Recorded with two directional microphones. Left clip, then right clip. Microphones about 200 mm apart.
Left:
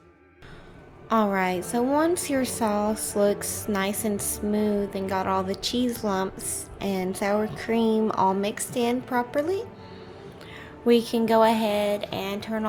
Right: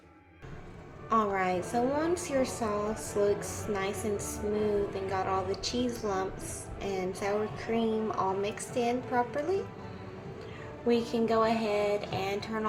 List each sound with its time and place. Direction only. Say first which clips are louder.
1.1 s a woman's voice: left 4 dB; 50° left (ahead or behind)
10.8 s a woman's voice: left 7 dB; 50° left (ahead or behind)